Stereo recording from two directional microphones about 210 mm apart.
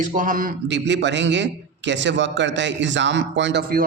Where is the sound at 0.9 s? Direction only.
60° right (ahead or behind).